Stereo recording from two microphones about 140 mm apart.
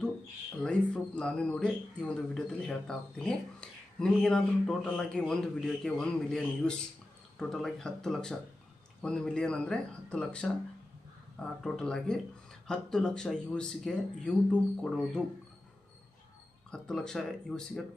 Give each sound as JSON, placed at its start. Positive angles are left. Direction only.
{"t": 0.6, "sound": "speech", "side_deg": 5}
{"t": 16.7, "sound": "speech", "side_deg": 5}